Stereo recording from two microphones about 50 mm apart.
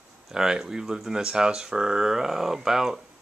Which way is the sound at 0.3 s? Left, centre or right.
Centre.